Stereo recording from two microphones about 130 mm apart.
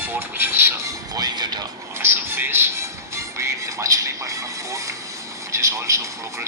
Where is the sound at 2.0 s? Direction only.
15° right (ahead or behind).